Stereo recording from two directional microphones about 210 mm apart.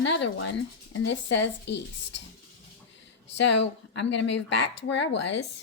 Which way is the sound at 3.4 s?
60° left (ahead or behind).